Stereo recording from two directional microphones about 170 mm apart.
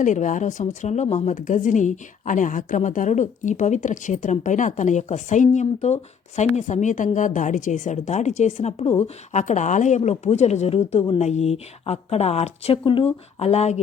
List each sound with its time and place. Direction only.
0.0 s a woman's voice: 50° left (ahead or behind)